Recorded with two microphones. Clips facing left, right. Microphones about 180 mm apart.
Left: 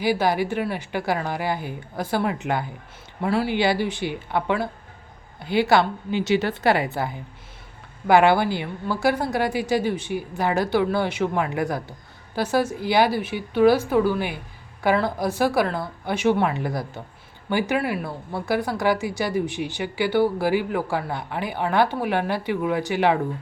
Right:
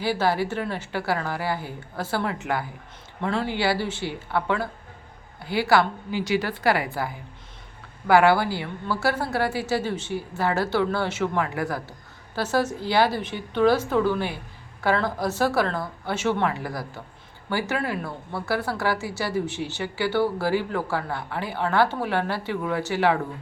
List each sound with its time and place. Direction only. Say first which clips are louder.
0.0 s a woman's voice: left 2 dB; 15° left (ahead or behind)